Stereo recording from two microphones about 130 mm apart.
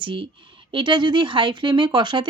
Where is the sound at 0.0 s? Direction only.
40° right (ahead or behind).